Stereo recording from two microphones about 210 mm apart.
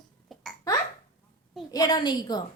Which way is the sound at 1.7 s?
20° left (ahead or behind).